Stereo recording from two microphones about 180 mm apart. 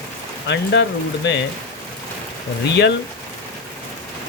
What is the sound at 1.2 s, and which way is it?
Speech, 70° left (ahead or behind).